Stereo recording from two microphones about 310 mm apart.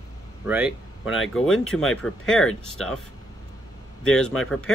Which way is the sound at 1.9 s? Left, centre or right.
Centre.